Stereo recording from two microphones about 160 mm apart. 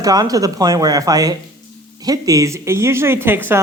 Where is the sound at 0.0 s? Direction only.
20° right (ahead or behind).